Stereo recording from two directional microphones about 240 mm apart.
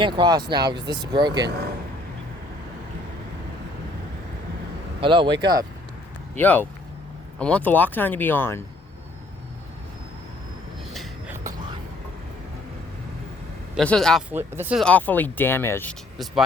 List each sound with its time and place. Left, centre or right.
0.0 s speech: centre
4.9 s speech: right
6.3 s speech: centre
10.9 s a sound: centre
13.7 s speech: centre